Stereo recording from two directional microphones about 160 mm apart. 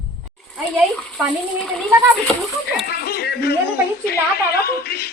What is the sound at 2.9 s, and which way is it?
A woman's voice, 75° left (ahead or behind).